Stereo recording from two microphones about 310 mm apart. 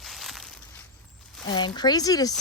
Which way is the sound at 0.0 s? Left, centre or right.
Centre.